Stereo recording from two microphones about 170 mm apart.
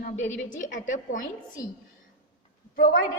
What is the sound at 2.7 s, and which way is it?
Speech, 60° left (ahead or behind).